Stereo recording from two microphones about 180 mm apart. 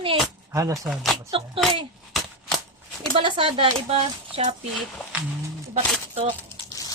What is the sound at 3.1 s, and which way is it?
Speech, 30° right (ahead or behind).